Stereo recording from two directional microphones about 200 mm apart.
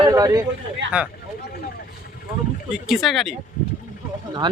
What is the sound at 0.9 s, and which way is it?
Speech, 5° right (ahead or behind).